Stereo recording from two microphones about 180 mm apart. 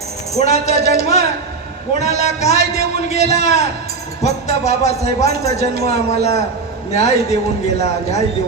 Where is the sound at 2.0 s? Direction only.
40° left (ahead or behind).